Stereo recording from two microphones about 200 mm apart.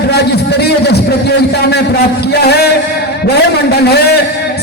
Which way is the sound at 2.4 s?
55° left (ahead or behind).